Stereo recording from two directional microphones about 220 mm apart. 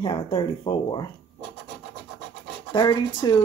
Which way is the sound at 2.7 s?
20° left (ahead or behind).